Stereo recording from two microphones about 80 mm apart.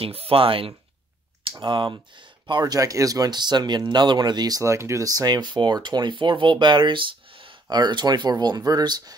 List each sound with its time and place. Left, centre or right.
0.3 s speech: right
1.6 s speech: right
2.6 s speech: right
7.7 s speech: right